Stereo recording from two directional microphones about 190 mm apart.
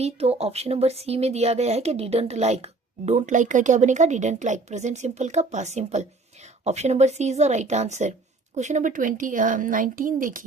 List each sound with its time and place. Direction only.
0.0 s a woman's voice: 30° right (ahead or behind)